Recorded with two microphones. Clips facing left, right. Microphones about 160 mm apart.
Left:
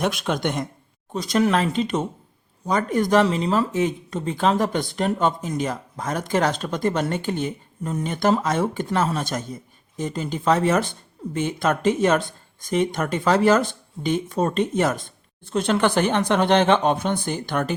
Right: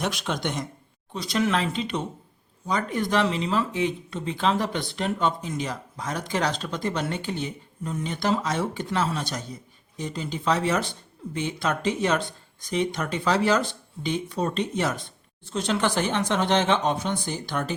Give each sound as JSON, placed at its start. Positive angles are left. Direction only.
{"t": 0.0, "sound": "speech", "side_deg": 55}